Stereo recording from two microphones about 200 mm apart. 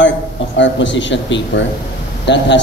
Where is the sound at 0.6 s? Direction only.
65° left (ahead or behind).